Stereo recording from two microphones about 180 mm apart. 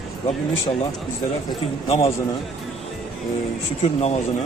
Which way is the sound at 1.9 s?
35° left (ahead or behind).